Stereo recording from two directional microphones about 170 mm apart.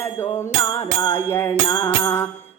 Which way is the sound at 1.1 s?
15° left (ahead or behind).